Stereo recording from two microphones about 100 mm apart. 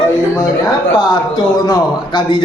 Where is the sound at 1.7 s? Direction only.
50° left (ahead or behind).